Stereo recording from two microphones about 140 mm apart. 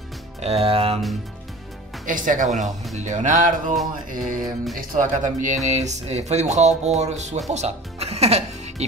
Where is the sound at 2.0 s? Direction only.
70° right (ahead or behind).